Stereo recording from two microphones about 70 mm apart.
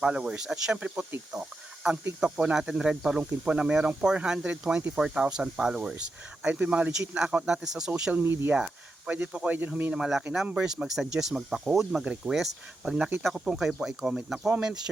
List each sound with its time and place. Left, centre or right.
0.0 s speech: centre
8.2 s speech: right
8.5 s a sound: centre
9.1 s speech: centre
9.9 s speech: centre
14.3 s speech: right
14.6 s speech: centre